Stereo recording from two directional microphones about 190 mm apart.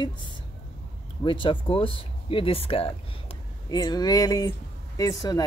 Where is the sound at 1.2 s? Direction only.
25° left (ahead or behind).